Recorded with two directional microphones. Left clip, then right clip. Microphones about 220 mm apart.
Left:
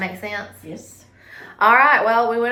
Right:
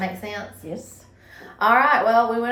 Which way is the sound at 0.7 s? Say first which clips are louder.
Right 3 dB; 15° right (ahead or behind).